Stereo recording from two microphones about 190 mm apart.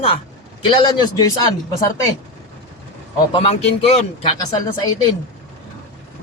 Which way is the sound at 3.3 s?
30° left (ahead or behind).